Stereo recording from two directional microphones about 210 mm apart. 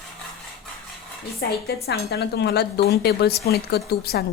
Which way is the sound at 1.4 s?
50° left (ahead or behind).